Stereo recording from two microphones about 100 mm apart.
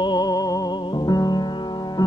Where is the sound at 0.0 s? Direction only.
45° left (ahead or behind).